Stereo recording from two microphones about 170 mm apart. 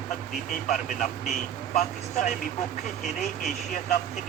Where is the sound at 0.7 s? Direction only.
50° left (ahead or behind).